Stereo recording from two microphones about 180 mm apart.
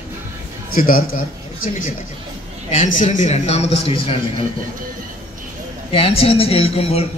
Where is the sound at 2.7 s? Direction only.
45° left (ahead or behind).